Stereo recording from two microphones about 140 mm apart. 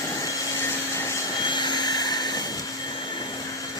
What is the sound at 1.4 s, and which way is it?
Vacuum cleaner, 35° left (ahead or behind).